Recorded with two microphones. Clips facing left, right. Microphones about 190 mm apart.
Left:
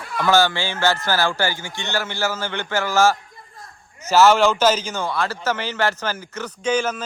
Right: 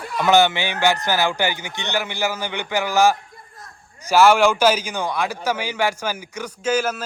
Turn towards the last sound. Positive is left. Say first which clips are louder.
# even
turn(degrees=-10)  # may be behind; listen again after turning